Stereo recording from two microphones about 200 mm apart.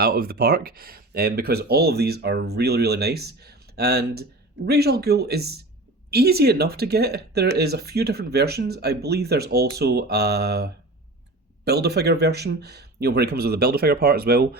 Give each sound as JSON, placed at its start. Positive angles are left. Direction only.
{"t": 0.0, "sound": "speech", "side_deg": -50}